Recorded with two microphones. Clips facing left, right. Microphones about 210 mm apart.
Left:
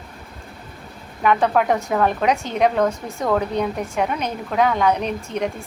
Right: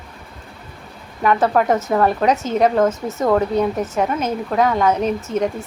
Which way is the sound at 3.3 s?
Centre (ahead or behind).